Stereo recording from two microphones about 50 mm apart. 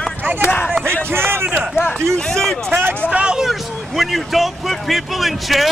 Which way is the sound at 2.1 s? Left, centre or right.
Centre.